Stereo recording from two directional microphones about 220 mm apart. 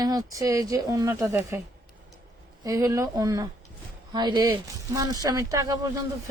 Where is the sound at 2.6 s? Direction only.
15° right (ahead or behind).